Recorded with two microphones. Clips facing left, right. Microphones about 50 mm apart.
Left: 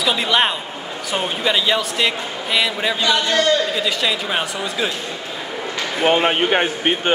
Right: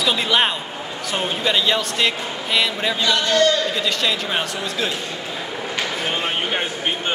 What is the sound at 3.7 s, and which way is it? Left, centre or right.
Speech, centre.